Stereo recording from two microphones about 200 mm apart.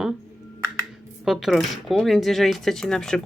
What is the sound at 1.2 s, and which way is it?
Speech, centre (ahead or behind).